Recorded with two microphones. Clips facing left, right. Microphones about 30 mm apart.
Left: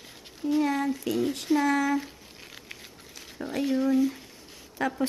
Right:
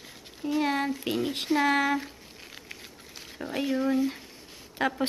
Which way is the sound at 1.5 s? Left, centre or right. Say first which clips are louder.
Right 1 dB; right.